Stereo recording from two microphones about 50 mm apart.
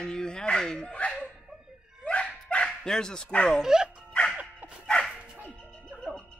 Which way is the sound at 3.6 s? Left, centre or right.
Centre.